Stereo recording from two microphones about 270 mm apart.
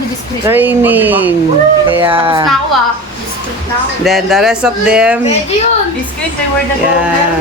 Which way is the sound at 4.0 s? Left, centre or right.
Centre.